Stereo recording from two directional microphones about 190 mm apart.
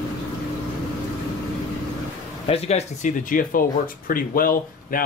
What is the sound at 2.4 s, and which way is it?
Speech, 35° left (ahead or behind).